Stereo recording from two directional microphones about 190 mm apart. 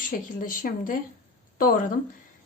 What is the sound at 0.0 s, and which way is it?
A woman's voice, 45° left (ahead or behind).